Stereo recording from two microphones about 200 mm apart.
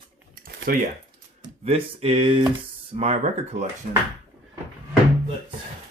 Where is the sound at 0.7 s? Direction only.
45° right (ahead or behind).